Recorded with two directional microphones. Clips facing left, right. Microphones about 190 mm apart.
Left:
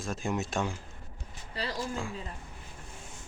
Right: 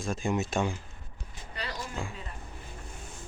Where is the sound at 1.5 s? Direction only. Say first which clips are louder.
Left 3 dB; 30° left (ahead or behind).